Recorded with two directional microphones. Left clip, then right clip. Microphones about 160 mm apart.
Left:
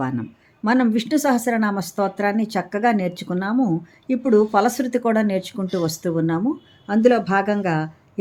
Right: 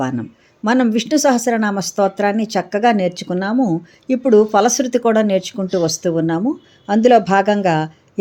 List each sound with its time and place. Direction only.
0.0 s speech: 5° right (ahead or behind)
6.8 s speech: 15° right (ahead or behind)